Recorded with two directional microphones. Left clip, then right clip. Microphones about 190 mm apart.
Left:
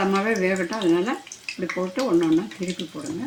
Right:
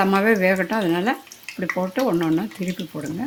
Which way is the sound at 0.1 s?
55° right (ahead or behind).